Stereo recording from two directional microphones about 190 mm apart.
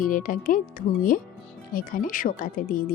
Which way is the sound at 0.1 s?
45° left (ahead or behind).